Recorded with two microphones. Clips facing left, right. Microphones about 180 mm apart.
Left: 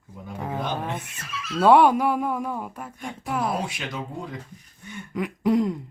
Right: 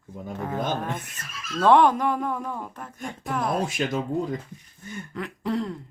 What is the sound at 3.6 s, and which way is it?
Speech, 45° right (ahead or behind).